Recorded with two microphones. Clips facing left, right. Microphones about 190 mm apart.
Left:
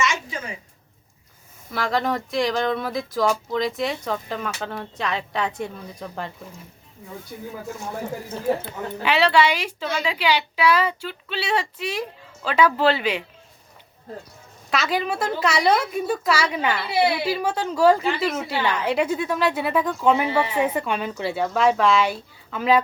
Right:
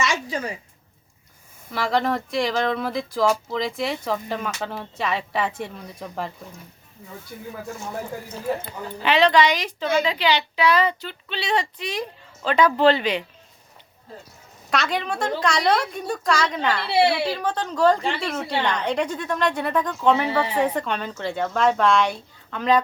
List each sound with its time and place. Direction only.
0.0 s a sound: 35° right (ahead or behind)
1.7 s speech: centre (ahead or behind)
9.0 s a woman's voice: 10° left (ahead or behind)
14.7 s a woman's voice: centre (ahead or behind)
16.9 s speech: 30° right (ahead or behind)
17.2 s a woman's voice: 10° left (ahead or behind)